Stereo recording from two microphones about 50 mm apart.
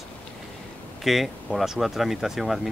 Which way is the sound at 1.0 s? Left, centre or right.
Centre.